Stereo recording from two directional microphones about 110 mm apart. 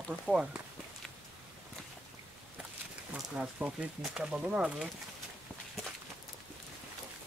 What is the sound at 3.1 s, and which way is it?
Speech, 10° right (ahead or behind).